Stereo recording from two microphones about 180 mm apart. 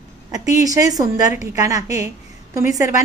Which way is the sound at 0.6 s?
20° right (ahead or behind).